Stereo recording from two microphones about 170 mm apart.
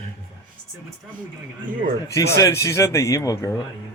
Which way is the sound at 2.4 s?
20° left (ahead or behind).